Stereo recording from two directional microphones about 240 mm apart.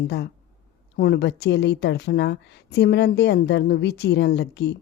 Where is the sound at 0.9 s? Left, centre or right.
Left.